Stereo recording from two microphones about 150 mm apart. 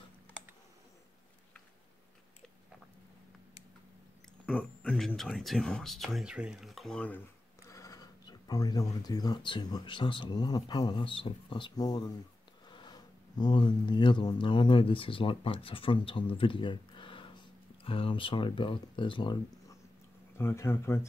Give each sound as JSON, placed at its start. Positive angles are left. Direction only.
{"t": 4.5, "sound": "speech", "side_deg": 5}
{"t": 20.3, "sound": "speech", "side_deg": 15}